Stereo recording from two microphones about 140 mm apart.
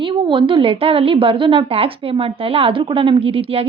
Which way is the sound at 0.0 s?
35° right (ahead or behind).